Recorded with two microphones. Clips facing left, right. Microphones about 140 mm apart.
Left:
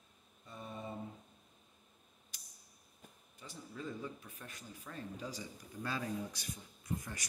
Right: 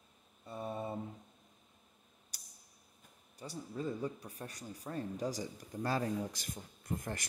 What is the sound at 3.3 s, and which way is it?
Speech, 35° right (ahead or behind).